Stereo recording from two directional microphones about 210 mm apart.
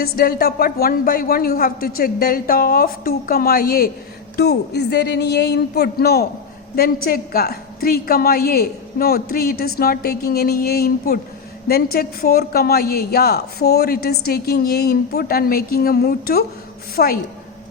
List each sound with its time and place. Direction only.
0.0 s a woman's voice: 45° left (ahead or behind)